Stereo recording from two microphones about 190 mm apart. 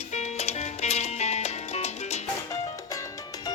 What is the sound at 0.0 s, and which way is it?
Music, 35° left (ahead or behind).